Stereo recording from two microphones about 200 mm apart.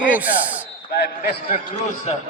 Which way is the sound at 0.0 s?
10° right (ahead or behind).